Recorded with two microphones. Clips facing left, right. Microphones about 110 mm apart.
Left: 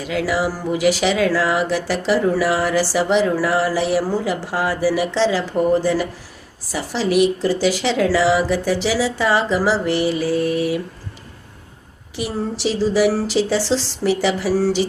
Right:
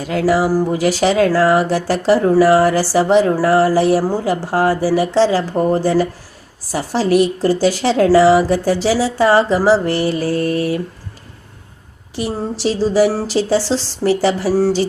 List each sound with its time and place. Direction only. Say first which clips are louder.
0.1 s speech: right 6 dB; 40° right (ahead or behind)
10.3 s mantra: right 2 dB; 5° left (ahead or behind)
12.8 s speech: right 2 dB; 35° right (ahead or behind)